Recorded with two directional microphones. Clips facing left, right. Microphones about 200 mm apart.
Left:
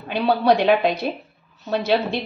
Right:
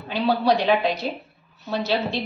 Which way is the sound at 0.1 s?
55° left (ahead or behind).